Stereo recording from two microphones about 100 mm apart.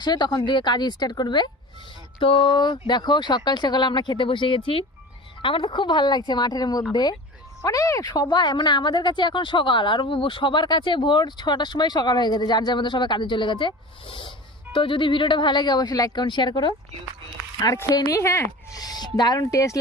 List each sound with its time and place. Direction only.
0.0 s speech: 45° left (ahead or behind)
7.6 s speech: 35° left (ahead or behind); by 16.7 s 50° left (ahead or behind)
17.9 s speech: 30° left (ahead or behind)